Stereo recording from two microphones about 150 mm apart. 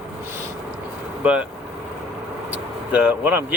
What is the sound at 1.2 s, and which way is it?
Speech, 10° right (ahead or behind).